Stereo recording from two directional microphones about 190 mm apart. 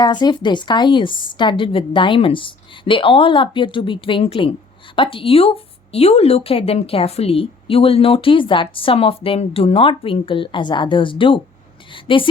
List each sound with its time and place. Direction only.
0.0 s a woman's voice: 20° left (ahead or behind)